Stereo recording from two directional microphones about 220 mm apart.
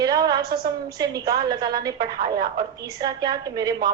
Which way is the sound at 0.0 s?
15° right (ahead or behind).